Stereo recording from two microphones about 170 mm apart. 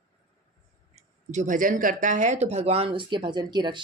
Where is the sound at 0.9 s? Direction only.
45° right (ahead or behind).